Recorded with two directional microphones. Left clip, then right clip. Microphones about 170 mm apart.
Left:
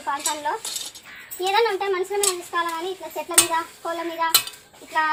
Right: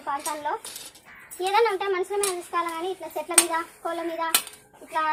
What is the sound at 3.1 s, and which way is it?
A woman's voice, centre (ahead or behind).